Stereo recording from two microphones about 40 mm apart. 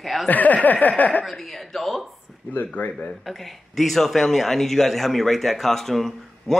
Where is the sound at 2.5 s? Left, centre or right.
Left.